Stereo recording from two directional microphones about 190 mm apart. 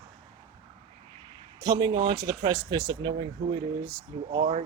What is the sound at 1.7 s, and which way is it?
Speech, 20° right (ahead or behind).